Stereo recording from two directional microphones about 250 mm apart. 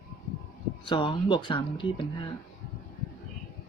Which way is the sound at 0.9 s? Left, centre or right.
Centre.